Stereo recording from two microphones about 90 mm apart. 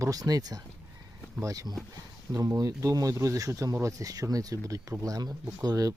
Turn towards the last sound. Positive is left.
turn(degrees=-45)  # may be behind; listen again after turning